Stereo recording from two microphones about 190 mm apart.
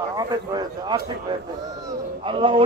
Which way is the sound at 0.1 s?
20° right (ahead or behind).